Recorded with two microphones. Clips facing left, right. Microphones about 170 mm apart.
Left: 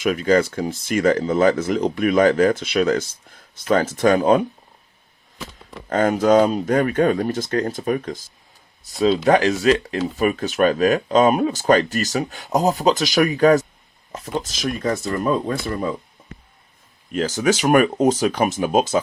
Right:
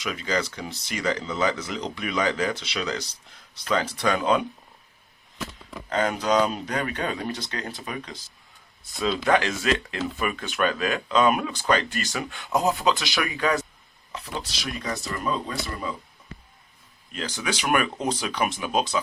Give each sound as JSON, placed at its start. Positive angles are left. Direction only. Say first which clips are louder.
{"t": 0.0, "sound": "speech", "louder": "left 10 dB", "side_deg": 50}
{"t": 5.9, "sound": "speech", "louder": "left 8 dB", "side_deg": 50}
{"t": 17.1, "sound": "speech", "louder": "left 11 dB", "side_deg": 45}